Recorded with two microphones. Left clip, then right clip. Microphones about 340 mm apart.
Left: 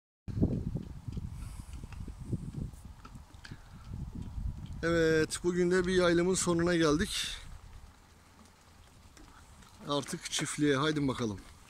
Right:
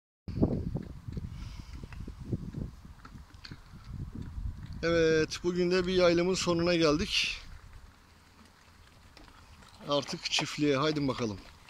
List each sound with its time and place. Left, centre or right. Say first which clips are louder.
0.4 s a sound: right 3 dB; right
4.7 s speech: right 2 dB; centre
9.8 s speech: right 4 dB; centre